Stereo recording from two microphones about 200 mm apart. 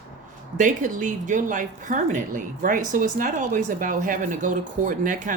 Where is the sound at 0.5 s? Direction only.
40° right (ahead or behind).